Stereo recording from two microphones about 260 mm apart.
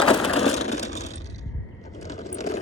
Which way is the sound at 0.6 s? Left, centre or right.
Left.